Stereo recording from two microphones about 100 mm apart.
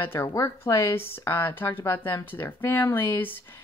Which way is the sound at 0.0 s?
20° left (ahead or behind).